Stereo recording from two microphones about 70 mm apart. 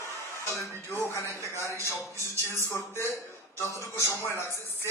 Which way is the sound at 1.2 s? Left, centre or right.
Right.